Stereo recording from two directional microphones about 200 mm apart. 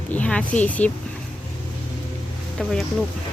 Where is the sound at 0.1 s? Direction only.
5° left (ahead or behind).